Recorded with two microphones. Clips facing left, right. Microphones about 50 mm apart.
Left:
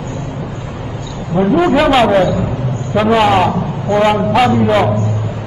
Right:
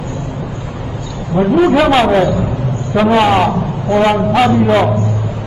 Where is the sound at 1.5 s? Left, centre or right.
Centre.